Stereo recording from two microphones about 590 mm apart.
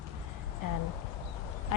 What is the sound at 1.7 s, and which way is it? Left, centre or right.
Duck, left.